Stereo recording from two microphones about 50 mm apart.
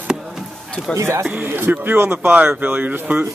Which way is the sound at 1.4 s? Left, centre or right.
Right.